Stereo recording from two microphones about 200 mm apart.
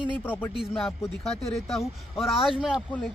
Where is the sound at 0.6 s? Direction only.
Centre (ahead or behind).